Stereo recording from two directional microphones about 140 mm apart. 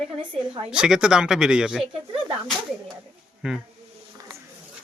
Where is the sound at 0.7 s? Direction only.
5° right (ahead or behind).